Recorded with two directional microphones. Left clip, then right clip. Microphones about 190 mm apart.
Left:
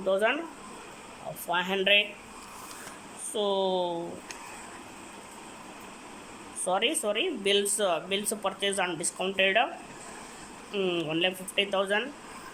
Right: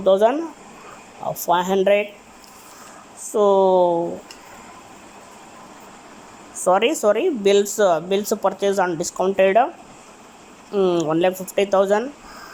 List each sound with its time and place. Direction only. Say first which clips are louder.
0.0 s speech: right 10 dB; 25° right (ahead or behind)
1.5 s speech: right 8 dB; 25° right (ahead or behind)
3.3 s speech: right 13 dB; 25° right (ahead or behind)
6.7 s speech: right 11 dB; 20° right (ahead or behind)
10.7 s speech: right 11 dB; 20° right (ahead or behind)